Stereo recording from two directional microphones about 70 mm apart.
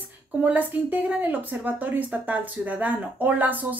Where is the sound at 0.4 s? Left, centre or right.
Right.